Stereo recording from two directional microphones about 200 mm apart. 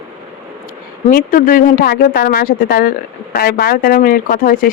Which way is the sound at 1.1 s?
45° left (ahead or behind).